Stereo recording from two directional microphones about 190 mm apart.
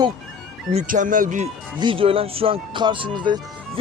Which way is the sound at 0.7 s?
45° right (ahead or behind).